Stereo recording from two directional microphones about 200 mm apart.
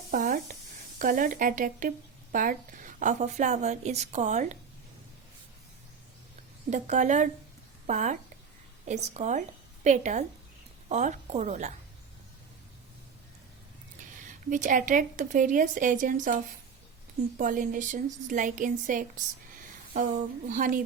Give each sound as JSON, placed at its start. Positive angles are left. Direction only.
{"t": 0.1, "sound": "a sound", "side_deg": -45}
{"t": 0.9, "sound": "a woman's voice", "side_deg": -45}
{"t": 6.7, "sound": "a woman's voice", "side_deg": -35}
{"t": 14.3, "sound": "a woman's voice", "side_deg": -40}
{"t": 20.5, "sound": "a woman's voice", "side_deg": -40}